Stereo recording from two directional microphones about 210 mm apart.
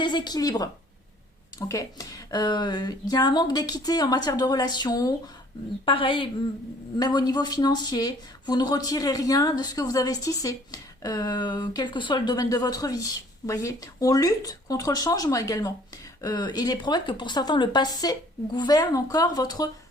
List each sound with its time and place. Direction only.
0.0 s a woman's voice: 20° left (ahead or behind)